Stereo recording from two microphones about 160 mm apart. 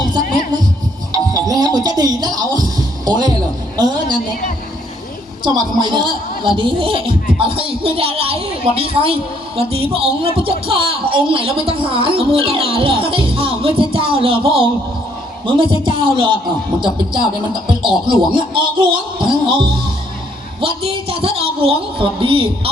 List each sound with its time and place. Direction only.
1.1 s music: 25° right (ahead or behind)
3.8 s a sound: 25° right (ahead or behind)
5.4 s speech: 30° right (ahead or behind)